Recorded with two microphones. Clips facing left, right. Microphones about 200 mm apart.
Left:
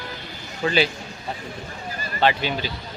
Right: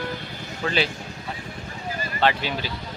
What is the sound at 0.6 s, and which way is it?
Speech, 10° left (ahead or behind).